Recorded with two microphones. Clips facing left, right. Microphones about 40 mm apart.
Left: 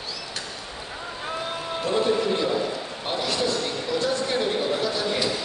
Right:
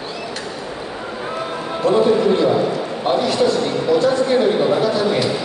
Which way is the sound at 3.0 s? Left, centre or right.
Centre.